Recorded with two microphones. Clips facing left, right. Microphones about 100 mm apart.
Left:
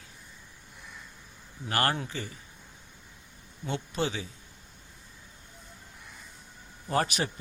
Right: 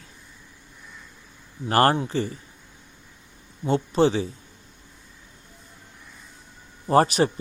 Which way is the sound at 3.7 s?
35° right (ahead or behind).